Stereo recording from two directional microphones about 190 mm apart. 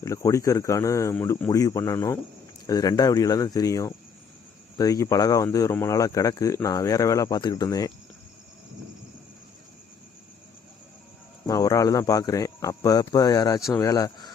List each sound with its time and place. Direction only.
0.0 s speech: 15° left (ahead or behind)
11.4 s speech: 20° left (ahead or behind)